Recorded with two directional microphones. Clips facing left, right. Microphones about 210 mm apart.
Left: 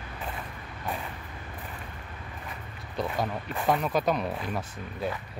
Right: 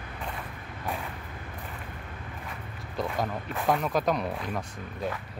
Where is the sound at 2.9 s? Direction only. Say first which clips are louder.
Even; centre (ahead or behind).